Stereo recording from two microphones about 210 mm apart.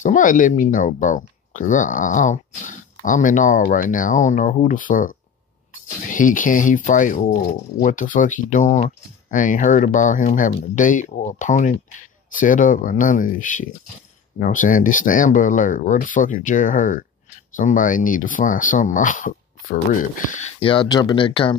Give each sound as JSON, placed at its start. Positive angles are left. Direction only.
{"t": 0.0, "sound": "speech", "side_deg": 40}
{"t": 20.6, "sound": "speech", "side_deg": 25}